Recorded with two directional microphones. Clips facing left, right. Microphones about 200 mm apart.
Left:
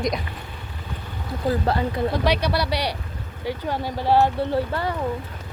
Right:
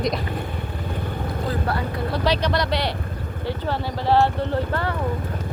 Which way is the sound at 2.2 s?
10° left (ahead or behind).